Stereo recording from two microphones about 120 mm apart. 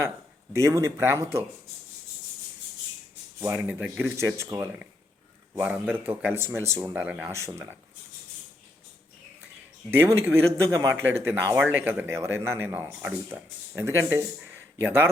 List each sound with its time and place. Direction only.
0.5 s speech: 25° right (ahead or behind)
3.4 s speech: 15° right (ahead or behind)
4.2 s speech: 25° right (ahead or behind)
5.5 s speech: 10° right (ahead or behind)
6.9 s speech: 15° right (ahead or behind)
9.9 s speech: 20° right (ahead or behind)